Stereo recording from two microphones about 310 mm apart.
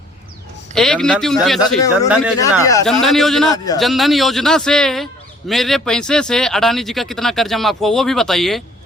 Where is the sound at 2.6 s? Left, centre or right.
Centre.